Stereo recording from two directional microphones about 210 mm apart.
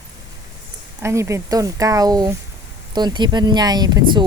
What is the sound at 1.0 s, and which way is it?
Speech, 15° right (ahead or behind).